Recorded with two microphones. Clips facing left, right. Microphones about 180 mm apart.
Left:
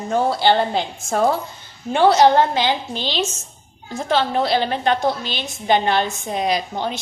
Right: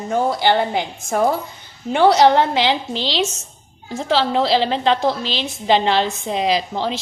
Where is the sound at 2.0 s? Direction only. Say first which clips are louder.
Right 1 dB; 60° right (ahead or behind).